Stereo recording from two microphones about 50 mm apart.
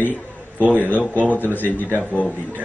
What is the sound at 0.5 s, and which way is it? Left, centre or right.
A man's voice, left.